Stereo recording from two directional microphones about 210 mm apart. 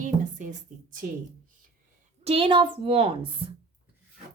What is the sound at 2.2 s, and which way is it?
A woman's voice, 25° right (ahead or behind).